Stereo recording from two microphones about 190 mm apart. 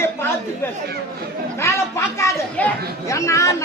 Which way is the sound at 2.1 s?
15° left (ahead or behind).